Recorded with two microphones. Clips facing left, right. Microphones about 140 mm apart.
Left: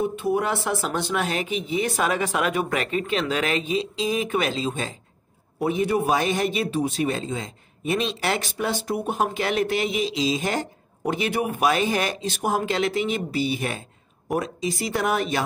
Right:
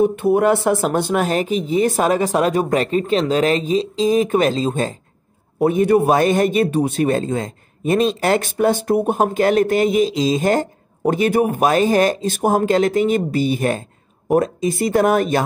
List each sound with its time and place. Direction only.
0.0 s a man's voice: 60° right (ahead or behind)